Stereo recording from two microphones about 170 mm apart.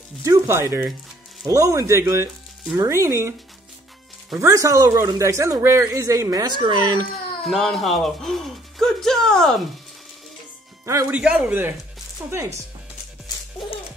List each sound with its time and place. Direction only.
0.2 s speech: 15° right (ahead or behind)
4.4 s speech: 20° right (ahead or behind)
7.4 s speech: centre (ahead or behind)
10.9 s speech: 15° right (ahead or behind)
11.1 s speech: 5° right (ahead or behind)